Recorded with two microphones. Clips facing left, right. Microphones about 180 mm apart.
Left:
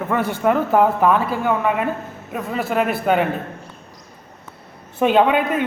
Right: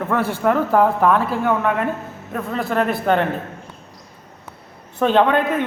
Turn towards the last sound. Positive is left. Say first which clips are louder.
# even
turn(degrees=5)  # may be behind; listen again after turning